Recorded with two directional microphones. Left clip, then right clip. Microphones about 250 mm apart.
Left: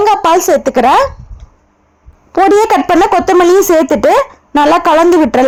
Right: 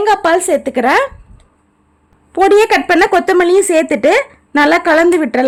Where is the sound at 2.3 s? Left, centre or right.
Centre.